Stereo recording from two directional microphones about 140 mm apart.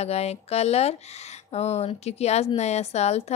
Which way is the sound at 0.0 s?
50° left (ahead or behind).